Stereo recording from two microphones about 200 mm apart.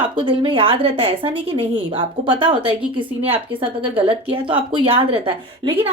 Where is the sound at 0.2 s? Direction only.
25° right (ahead or behind).